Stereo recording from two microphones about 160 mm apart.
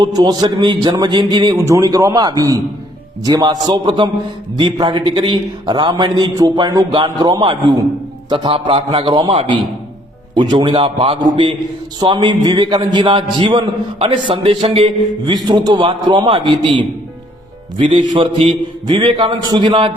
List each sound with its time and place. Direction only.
0.0 s a man's voice: 25° right (ahead or behind)